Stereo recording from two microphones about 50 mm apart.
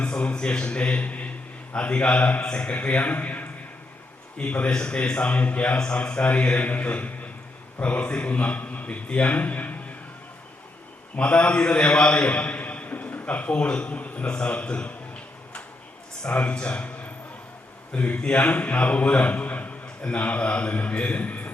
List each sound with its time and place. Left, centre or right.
0.0 s a sound: left
1.7 s a man's voice: left
11.2 s a man's voice: left
16.2 s a man's voice: left